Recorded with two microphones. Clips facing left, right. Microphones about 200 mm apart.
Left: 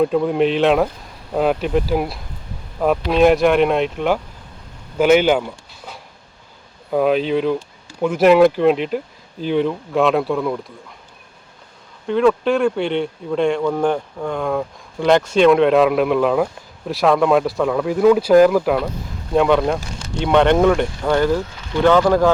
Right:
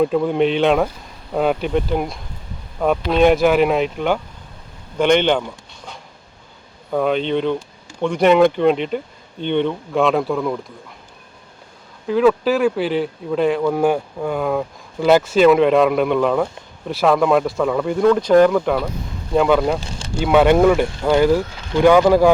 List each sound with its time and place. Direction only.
0.0 s speech: centre (ahead or behind)
12.0 s speech: centre (ahead or behind)